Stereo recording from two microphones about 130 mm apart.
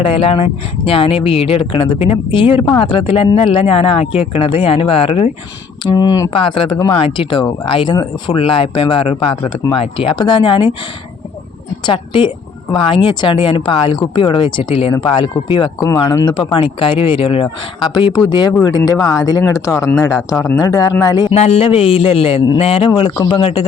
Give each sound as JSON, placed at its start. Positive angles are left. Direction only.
{"t": 0.0, "sound": "speech", "side_deg": 45}
{"t": 5.8, "sound": "speech", "side_deg": 30}
{"t": 6.3, "sound": "speech", "side_deg": 40}
{"t": 11.9, "sound": "speech", "side_deg": 40}
{"t": 21.3, "sound": "speech", "side_deg": 55}